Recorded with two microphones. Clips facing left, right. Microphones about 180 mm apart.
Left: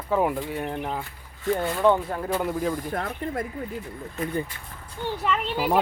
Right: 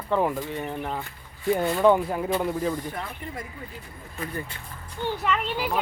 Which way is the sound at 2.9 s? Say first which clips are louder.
Left 6 dB; 50° left (ahead or behind).